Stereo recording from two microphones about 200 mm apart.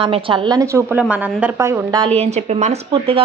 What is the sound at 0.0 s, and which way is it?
A woman's voice, 25° right (ahead or behind).